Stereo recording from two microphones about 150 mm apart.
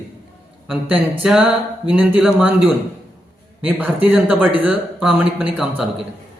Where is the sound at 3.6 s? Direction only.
10° right (ahead or behind).